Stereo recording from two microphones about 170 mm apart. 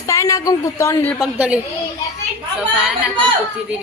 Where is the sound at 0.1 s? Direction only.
20° left (ahead or behind).